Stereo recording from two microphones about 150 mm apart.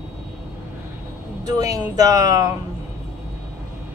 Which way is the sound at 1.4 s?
25° right (ahead or behind).